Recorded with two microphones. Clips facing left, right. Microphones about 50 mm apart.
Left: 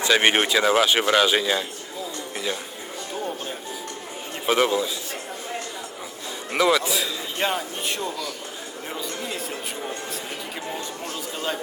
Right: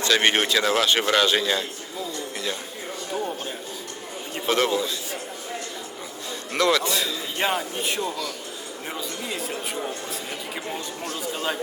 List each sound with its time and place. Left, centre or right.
0.0 s speech: centre
4.4 s speech: centre
6.5 s a man's voice: centre